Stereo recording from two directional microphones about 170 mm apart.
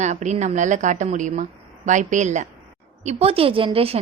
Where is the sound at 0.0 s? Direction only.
45° right (ahead or behind).